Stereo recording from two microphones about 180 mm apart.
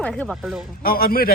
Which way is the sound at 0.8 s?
55° left (ahead or behind).